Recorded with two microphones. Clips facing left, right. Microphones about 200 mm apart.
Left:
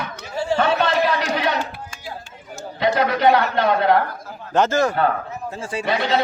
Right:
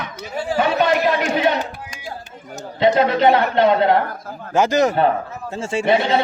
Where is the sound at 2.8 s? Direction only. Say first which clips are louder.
Right 3 dB; 25° right (ahead or behind).